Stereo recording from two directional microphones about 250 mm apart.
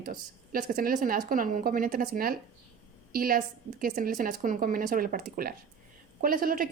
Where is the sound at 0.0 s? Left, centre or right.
Right.